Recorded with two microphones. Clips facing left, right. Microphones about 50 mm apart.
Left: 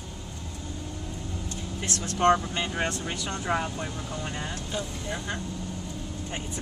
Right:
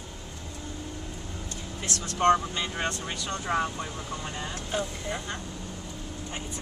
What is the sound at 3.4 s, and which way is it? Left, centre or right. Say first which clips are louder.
Speech: right 1 dB; centre.